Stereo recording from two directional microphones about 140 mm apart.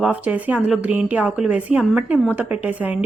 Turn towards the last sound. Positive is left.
turn(degrees=-10)  # may be behind; listen again after turning